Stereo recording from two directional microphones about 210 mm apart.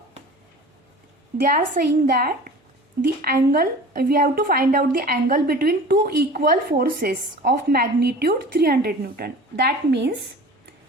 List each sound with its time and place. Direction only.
1.4 s a woman's voice: 40° right (ahead or behind)